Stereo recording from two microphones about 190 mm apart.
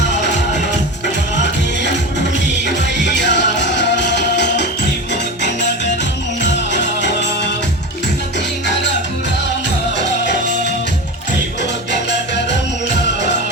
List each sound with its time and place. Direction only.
2.6 s music: 65° left (ahead or behind)
10.0 s music: 65° left (ahead or behind)